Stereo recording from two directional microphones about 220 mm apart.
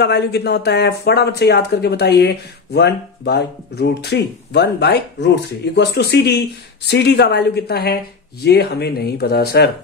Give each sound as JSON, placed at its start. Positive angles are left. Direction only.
{"t": 0.0, "sound": "speech", "side_deg": 50}